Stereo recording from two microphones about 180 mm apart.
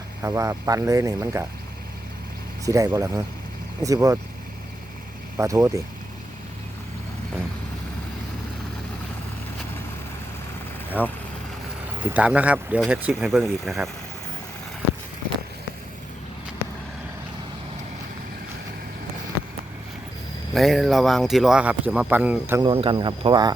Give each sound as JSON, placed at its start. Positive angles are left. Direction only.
{"t": 0.2, "sound": "speech", "side_deg": -15}
{"t": 2.6, "sound": "speech", "side_deg": -15}
{"t": 5.4, "sound": "speech", "side_deg": -15}
{"t": 11.0, "sound": "speech", "side_deg": -10}
{"t": 20.5, "sound": "speech", "side_deg": 0}
{"t": 22.6, "sound": "speech", "side_deg": -30}